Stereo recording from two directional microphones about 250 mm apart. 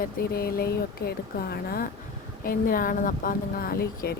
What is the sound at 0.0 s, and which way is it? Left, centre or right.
Speech, left.